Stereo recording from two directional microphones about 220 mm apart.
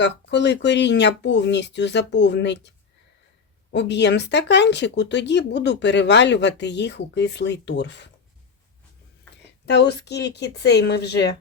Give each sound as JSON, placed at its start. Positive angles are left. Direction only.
{"t": 0.0, "sound": "speech", "side_deg": 55}
{"t": 9.6, "sound": "speech", "side_deg": 50}